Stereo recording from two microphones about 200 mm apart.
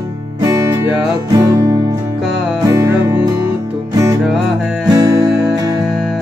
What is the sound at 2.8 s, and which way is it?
Music, 15° right (ahead or behind).